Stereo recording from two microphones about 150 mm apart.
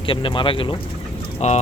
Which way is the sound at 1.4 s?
50° left (ahead or behind).